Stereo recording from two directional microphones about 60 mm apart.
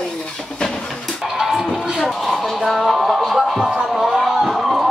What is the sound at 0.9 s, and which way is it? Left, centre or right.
Music, centre.